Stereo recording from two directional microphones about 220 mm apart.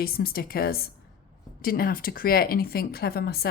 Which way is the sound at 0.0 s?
45° left (ahead or behind).